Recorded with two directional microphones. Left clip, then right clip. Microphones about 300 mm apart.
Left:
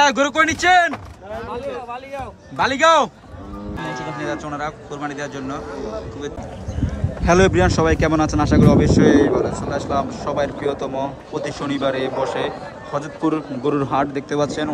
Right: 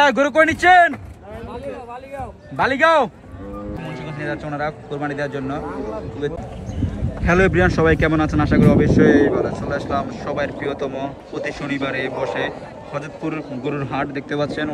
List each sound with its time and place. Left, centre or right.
0.0 s a man's voice: centre
2.5 s a man's voice: centre
4.2 s a man's voice: centre
7.2 s speech: centre